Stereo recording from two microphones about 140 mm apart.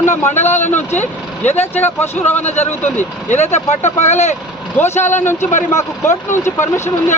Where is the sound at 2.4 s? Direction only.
55° left (ahead or behind).